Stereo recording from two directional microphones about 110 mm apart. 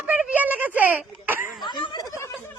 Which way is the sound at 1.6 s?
40° left (ahead or behind).